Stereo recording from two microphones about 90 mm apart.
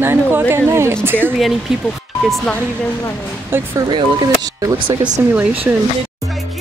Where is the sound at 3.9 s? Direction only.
45° right (ahead or behind).